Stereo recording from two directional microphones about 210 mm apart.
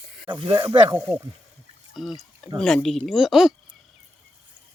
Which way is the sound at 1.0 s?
10° right (ahead or behind).